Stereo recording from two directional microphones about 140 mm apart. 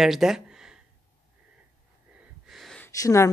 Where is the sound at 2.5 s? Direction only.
Centre (ahead or behind).